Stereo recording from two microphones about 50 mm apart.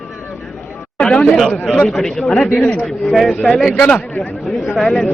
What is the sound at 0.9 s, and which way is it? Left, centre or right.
Chatter, centre.